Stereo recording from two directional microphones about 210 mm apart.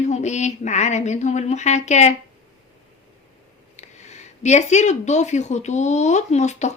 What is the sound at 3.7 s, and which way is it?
Speech, 35° left (ahead or behind).